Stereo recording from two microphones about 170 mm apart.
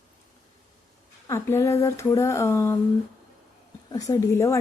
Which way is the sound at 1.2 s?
15° left (ahead or behind).